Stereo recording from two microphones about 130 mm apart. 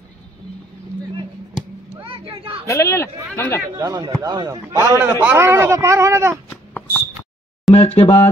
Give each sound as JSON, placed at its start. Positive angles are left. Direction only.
{"t": 2.0, "sound": "vehicle", "side_deg": -45}
{"t": 2.6, "sound": "speech", "side_deg": 25}
{"t": 3.7, "sound": "speech", "side_deg": -35}
{"t": 6.5, "sound": "a sound", "side_deg": 15}
{"t": 7.7, "sound": "speech", "side_deg": 45}